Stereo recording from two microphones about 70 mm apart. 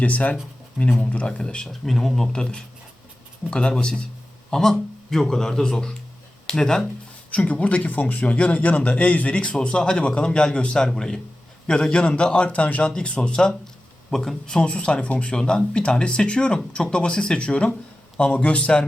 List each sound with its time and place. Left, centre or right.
0.0 s a man's voice: left
1.6 s a man's voice: centre
7.3 s a man's voice: centre